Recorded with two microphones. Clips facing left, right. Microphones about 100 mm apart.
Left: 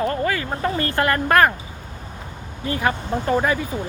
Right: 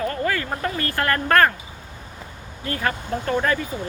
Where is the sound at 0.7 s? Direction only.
25° left (ahead or behind).